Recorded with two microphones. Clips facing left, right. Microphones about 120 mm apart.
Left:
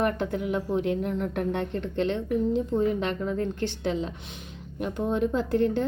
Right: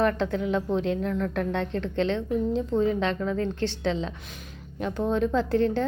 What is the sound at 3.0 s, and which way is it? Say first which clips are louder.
Speech: right 1 dB; 70° right (ahead or behind).